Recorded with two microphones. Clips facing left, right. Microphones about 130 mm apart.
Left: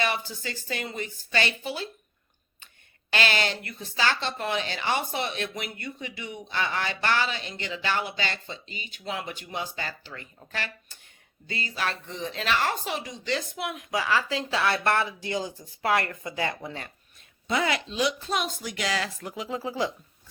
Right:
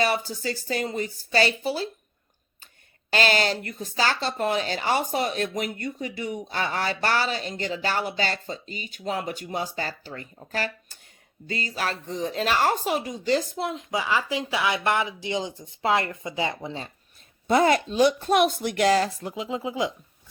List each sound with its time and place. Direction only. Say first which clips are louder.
0.0 s speech: right 5 dB; 40° right (ahead or behind)
3.1 s speech: right 4 dB; 40° right (ahead or behind)
13.6 s speech: right 2 dB; 25° right (ahead or behind)
17.5 s speech: right 7 dB; 40° right (ahead or behind)
19.3 s speech: right 2 dB; 20° right (ahead or behind)